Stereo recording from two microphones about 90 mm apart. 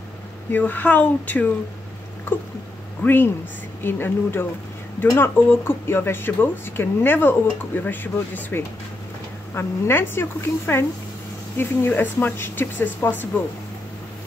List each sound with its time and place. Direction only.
0.5 s speech: 20° left (ahead or behind)
3.0 s speech: 20° left (ahead or behind)